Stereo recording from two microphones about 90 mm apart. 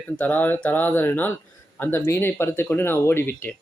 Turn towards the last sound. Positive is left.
turn(degrees=25)  # may be behind; listen again after turning